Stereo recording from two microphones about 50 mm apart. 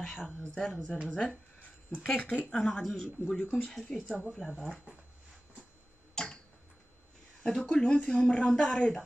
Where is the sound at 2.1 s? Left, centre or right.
Left.